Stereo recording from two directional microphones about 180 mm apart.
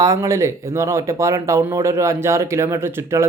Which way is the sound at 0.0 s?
15° right (ahead or behind).